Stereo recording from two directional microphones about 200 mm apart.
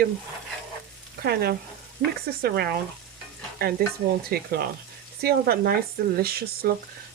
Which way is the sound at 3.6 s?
50° right (ahead or behind).